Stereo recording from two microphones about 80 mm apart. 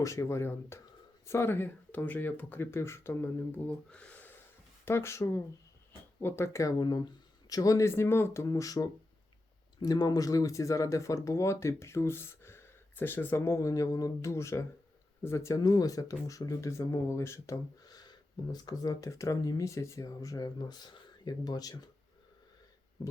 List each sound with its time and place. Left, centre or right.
0.0 s speech: left
3.7 s speech: centre
4.9 s speech: left
6.7 s speech: left
15.6 s speech: left
17.8 s speech: left